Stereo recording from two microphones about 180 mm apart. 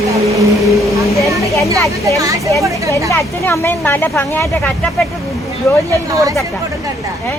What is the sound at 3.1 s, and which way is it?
Speech, 15° left (ahead or behind).